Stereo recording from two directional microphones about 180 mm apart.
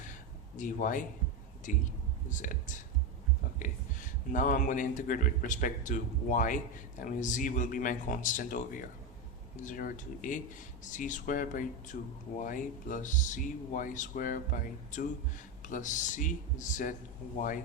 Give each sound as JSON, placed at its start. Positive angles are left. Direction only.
{"t": 0.5, "sound": "speech", "side_deg": 45}
{"t": 15.6, "sound": "speech", "side_deg": 45}